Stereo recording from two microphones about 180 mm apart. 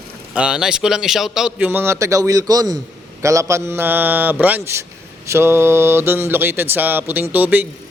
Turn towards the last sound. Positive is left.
turn(degrees=-10)  # may be behind; listen again after turning